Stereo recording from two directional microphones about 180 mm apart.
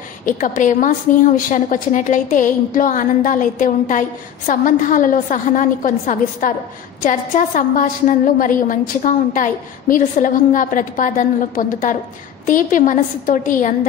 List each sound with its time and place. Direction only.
0.4 s a woman's voice: 45° left (ahead or behind)